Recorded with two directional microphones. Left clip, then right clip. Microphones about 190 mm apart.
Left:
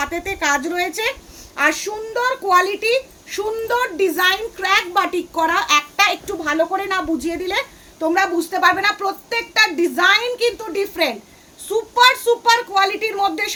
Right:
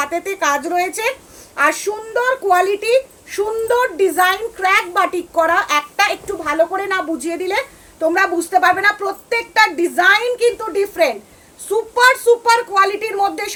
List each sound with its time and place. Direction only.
0.0 s a woman's voice: 20° left (ahead or behind)